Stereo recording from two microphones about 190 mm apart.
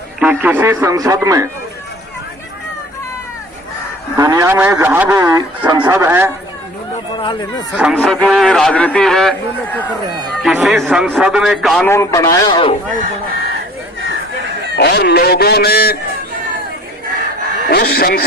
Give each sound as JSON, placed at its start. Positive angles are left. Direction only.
{"t": 0.2, "sound": "a man's voice", "side_deg": -10}
{"t": 4.2, "sound": "a man's voice", "side_deg": -20}
{"t": 7.2, "sound": "speech", "side_deg": 25}
{"t": 7.8, "sound": "a man's voice", "side_deg": 0}
{"t": 10.4, "sound": "a man's voice", "side_deg": 0}
{"t": 11.9, "sound": "a man's voice", "side_deg": 15}
{"t": 14.8, "sound": "speech", "side_deg": 60}
{"t": 17.7, "sound": "speech", "side_deg": 55}